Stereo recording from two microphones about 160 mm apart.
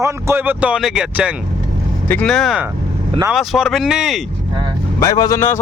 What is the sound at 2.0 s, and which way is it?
Speech, 5° left (ahead or behind).